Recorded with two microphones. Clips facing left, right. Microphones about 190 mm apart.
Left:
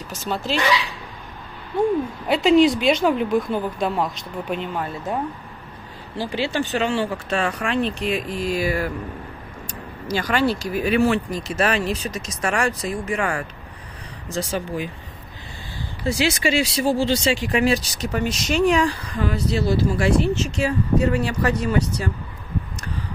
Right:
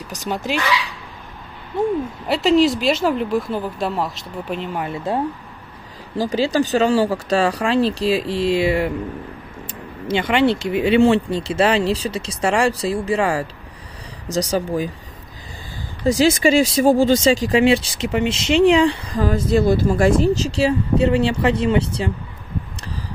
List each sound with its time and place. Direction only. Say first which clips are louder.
0.1 s speech: right 1 dB; 15° right (ahead or behind)
2.2 s speech: even; centre (ahead or behind)
6.1 s speech: right 6 dB; 40° right (ahead or behind)
16.1 s speech: right 6 dB; 45° right (ahead or behind)
17.6 s speech: right 5 dB; 25° right (ahead or behind); by 20.2 s 45° right (ahead or behind)
20.4 s speech: right 4 dB; 30° right (ahead or behind)